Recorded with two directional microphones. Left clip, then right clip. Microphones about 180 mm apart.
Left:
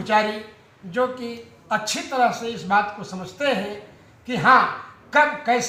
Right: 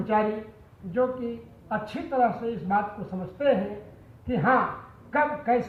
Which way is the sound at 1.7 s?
30° left (ahead or behind).